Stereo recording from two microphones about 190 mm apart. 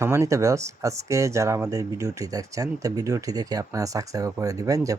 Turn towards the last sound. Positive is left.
turn(degrees=-20)  # may be behind; listen again after turning